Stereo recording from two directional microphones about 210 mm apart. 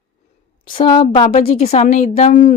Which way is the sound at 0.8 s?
20° left (ahead or behind).